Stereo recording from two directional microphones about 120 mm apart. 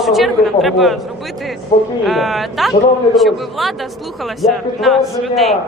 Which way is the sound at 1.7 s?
75° left (ahead or behind).